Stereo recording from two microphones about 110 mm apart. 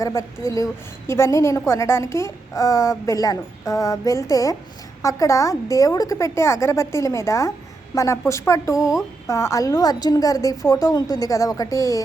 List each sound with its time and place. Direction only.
0.0 s a woman's voice: 30° left (ahead or behind)